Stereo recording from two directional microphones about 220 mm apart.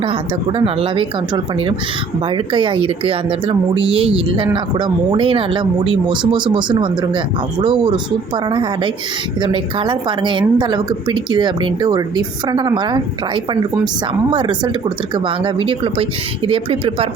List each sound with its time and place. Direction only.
0.0 s a woman's voice: 25° right (ahead or behind)